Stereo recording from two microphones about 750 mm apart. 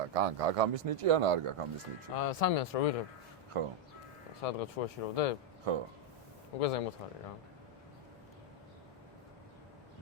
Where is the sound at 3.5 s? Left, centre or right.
Right.